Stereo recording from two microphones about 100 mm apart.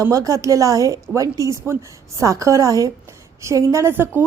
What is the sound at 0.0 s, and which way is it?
A woman's voice, 35° right (ahead or behind).